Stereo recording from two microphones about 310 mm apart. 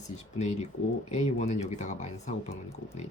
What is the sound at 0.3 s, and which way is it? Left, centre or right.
Speech, left.